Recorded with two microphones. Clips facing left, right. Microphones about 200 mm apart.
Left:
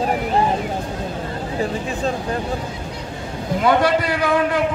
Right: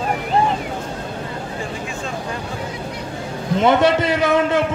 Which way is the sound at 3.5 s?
25° right (ahead or behind).